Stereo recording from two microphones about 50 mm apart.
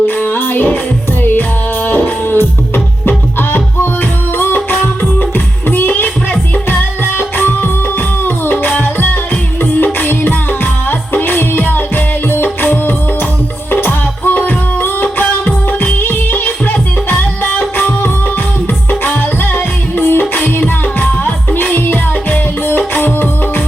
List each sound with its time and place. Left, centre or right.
0.0 s music: left